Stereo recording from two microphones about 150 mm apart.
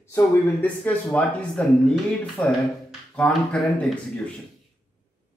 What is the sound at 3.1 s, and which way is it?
Speech, 5° left (ahead or behind).